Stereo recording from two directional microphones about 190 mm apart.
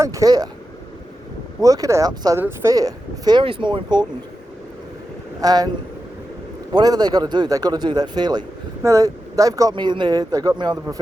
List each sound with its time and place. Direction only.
0.0 s a man's voice: 15° right (ahead or behind)
1.6 s a man's voice: 15° right (ahead or behind)
5.4 s a man's voice: 20° right (ahead or behind)
6.7 s a man's voice: 20° right (ahead or behind)